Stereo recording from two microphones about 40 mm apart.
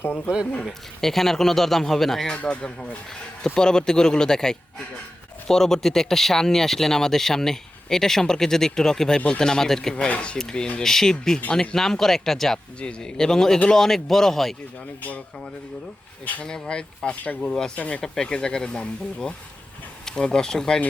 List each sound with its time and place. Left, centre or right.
0.6 s speech: centre
2.3 s a man's voice: left; by 10.1 s centre
10.1 s speech: left; by 12.5 s centre
12.8 s speech: left; by 14.5 s centre
16.4 s a man's voice: centre
18.0 s speech: centre